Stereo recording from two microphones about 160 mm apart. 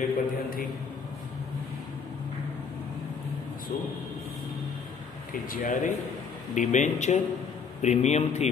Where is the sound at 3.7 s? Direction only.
50° left (ahead or behind).